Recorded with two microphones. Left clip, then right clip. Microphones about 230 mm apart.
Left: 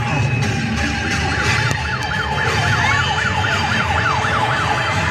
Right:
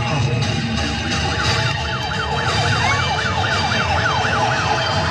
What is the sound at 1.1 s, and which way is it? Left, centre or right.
Music, left.